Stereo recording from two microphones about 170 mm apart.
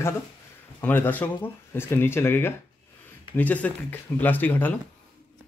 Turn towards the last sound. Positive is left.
turn(degrees=10)  # may be behind; listen again after turning